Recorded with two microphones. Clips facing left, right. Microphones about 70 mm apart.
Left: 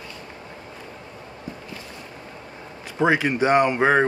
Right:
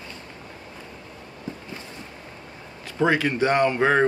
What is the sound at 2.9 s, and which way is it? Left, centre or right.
Speech, centre.